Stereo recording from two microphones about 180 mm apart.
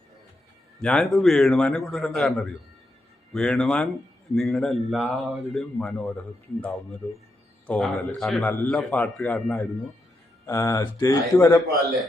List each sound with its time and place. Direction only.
0.8 s a man's voice: 5° left (ahead or behind)